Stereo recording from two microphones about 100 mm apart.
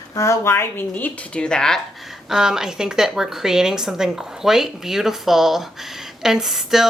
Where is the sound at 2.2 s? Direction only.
5° right (ahead or behind).